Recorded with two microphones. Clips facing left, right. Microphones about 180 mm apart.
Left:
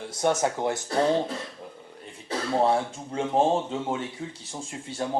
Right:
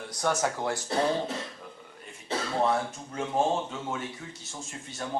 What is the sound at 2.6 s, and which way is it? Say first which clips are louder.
Speech: left 4 dB; 30° left (ahead or behind).